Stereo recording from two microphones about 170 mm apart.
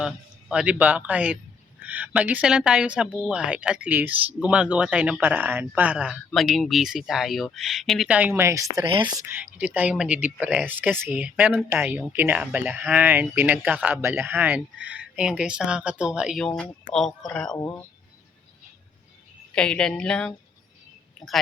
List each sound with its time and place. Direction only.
0.0 s a man's voice: 5° right (ahead or behind)
17.6 s speech: 15° left (ahead or behind)
19.5 s speech: 5° left (ahead or behind)